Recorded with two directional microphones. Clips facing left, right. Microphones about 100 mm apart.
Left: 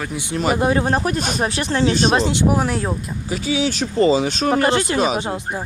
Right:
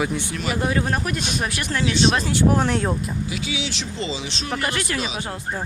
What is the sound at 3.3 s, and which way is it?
Speech, 40° left (ahead or behind).